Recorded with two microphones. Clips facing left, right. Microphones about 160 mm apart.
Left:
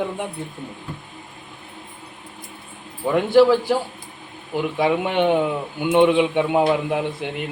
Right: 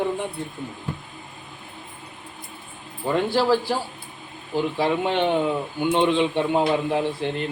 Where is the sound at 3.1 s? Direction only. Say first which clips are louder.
Left 6 dB; 15° left (ahead or behind).